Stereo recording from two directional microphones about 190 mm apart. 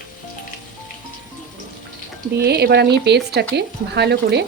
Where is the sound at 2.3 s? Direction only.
60° right (ahead or behind).